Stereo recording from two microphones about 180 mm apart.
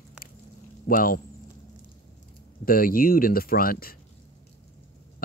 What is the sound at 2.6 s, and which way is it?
Speech, 55° left (ahead or behind).